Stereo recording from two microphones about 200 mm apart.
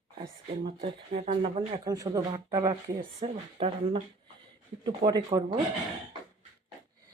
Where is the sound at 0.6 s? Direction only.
30° right (ahead or behind).